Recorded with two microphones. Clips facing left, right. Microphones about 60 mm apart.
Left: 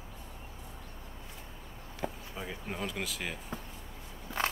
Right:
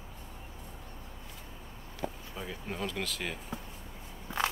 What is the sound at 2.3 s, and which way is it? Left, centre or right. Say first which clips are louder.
Speech: even; centre.